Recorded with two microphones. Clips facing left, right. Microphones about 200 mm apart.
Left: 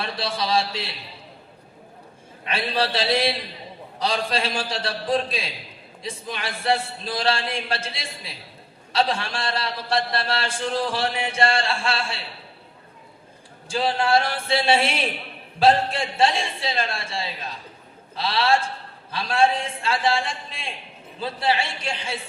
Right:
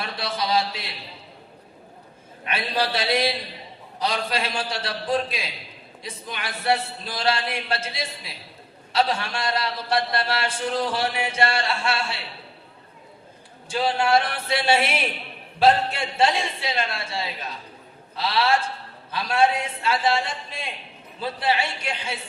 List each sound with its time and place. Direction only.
0.0 s a man's voice: 30° left (ahead or behind)
2.4 s a man's voice: 30° left (ahead or behind)
13.7 s a man's voice: 30° left (ahead or behind)